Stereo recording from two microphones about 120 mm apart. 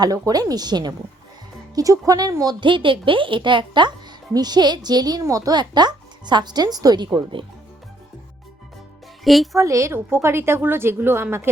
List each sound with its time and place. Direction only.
0.0 s speech: 30° right (ahead or behind)
9.2 s speech: centre (ahead or behind)
9.6 s a woman's voice: 25° right (ahead or behind)